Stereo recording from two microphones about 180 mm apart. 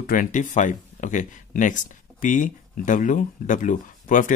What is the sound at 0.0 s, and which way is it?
Speech, 50° left (ahead or behind).